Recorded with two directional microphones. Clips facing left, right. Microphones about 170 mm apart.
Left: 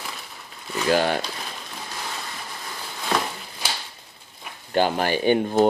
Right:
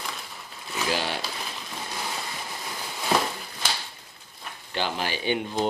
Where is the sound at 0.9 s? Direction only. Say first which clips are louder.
Left 9 dB; 50° left (ahead or behind).